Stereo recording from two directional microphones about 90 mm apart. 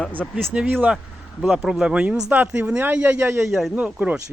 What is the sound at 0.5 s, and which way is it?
Speech, 20° right (ahead or behind).